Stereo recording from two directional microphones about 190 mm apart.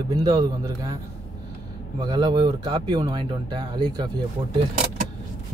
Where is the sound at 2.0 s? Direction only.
20° right (ahead or behind).